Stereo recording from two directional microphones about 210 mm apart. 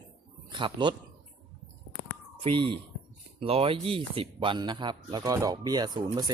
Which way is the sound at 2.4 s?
25° right (ahead or behind).